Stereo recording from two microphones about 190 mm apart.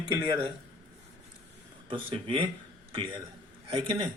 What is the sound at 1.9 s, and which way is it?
Speech, 30° right (ahead or behind).